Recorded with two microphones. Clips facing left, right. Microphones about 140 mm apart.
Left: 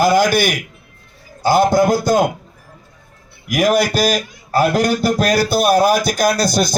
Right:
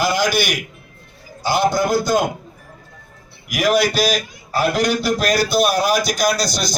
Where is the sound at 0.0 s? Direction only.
50° left (ahead or behind).